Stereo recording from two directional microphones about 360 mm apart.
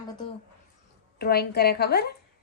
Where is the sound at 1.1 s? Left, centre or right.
Left.